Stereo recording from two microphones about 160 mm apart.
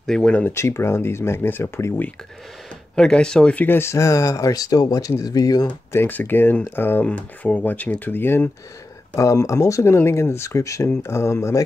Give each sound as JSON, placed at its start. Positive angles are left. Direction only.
{"t": 0.0, "sound": "speech", "side_deg": 5}
{"t": 3.0, "sound": "speech", "side_deg": 5}
{"t": 5.7, "sound": "speech", "side_deg": 15}